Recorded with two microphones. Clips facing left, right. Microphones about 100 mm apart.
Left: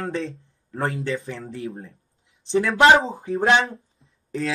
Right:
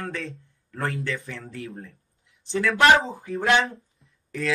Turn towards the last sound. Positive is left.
turn(degrees=25)  # may be behind; listen again after turning